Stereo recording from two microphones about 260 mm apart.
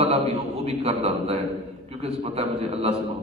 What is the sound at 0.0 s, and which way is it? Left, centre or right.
A man's voice, right.